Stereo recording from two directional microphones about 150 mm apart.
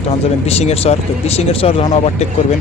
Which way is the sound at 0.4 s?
45° left (ahead or behind).